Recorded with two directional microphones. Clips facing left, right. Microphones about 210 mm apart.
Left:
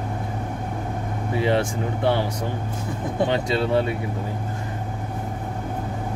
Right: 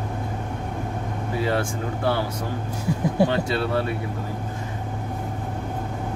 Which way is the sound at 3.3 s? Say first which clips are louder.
Left 2 dB; 20° left (ahead or behind).